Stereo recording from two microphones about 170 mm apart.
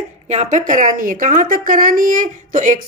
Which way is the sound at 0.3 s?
45° right (ahead or behind).